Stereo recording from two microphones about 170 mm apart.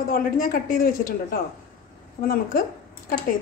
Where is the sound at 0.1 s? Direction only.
55° left (ahead or behind).